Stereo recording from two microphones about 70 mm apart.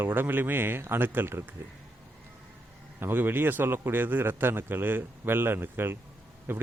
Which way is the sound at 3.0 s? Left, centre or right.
Right.